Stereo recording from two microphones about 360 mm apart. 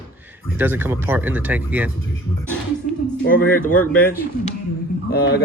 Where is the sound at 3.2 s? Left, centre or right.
Left.